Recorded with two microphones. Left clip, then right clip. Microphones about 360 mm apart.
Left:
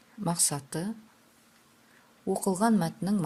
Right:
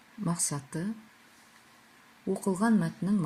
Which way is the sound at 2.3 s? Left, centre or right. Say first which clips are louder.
Left 2 dB; left.